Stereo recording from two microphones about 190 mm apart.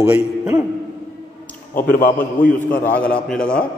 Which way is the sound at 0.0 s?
10° right (ahead or behind).